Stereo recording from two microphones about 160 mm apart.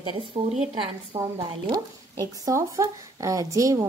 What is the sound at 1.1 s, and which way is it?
Speech, 20° right (ahead or behind).